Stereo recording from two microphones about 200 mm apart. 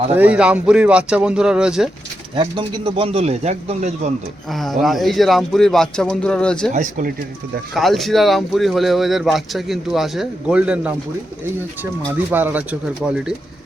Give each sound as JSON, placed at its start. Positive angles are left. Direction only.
{"t": 0.2, "sound": "speech", "side_deg": -5}
{"t": 2.3, "sound": "a man's voice", "side_deg": -25}
{"t": 4.5, "sound": "speech", "side_deg": 0}
{"t": 6.7, "sound": "speech", "side_deg": -40}
{"t": 7.7, "sound": "speech", "side_deg": 0}
{"t": 12.3, "sound": "speech", "side_deg": -10}